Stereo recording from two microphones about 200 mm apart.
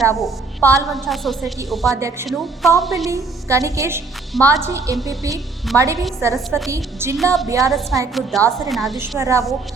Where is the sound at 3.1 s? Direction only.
15° right (ahead or behind).